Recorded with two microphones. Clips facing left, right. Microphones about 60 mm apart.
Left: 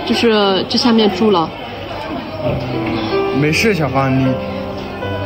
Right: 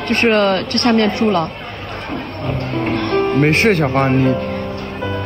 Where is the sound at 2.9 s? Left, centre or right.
Right.